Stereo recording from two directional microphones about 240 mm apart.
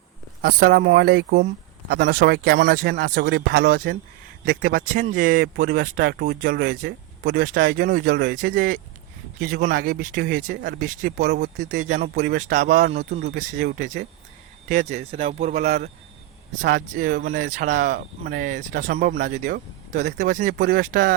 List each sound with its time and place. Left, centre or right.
0.4 s speech: right